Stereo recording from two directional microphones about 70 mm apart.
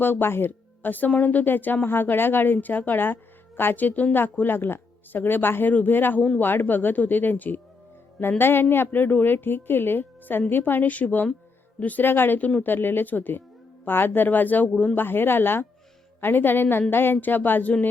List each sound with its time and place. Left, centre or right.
0.0 s speech: left